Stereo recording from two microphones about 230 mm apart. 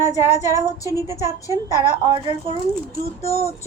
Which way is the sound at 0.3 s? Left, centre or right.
Centre.